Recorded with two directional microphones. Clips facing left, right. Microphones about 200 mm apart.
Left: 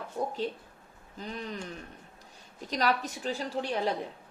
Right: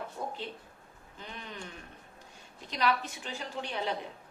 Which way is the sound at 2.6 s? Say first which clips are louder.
Left 2 dB; 40° left (ahead or behind).